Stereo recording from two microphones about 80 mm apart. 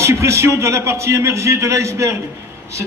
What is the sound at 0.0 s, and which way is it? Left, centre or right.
A man's voice, right.